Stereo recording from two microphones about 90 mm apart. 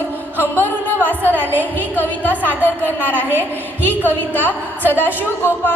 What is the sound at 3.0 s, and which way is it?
A woman's voice, 20° left (ahead or behind).